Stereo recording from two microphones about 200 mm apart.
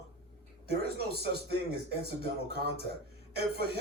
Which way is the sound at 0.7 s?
55° right (ahead or behind).